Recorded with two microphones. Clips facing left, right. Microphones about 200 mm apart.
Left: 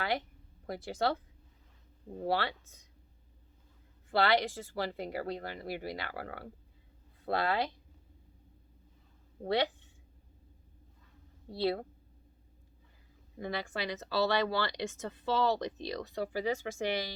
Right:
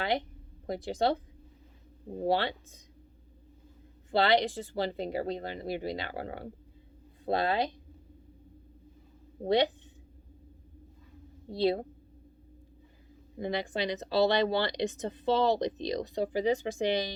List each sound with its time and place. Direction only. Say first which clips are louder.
0.7 s speech: right 4 dB; 15° right (ahead or behind)
4.1 s speech: right 3 dB; 20° right (ahead or behind)
9.4 s speech: right 5 dB; 20° right (ahead or behind)
11.4 s speech: right 4 dB; 20° right (ahead or behind)
13.4 s speech: right 5 dB; 20° right (ahead or behind)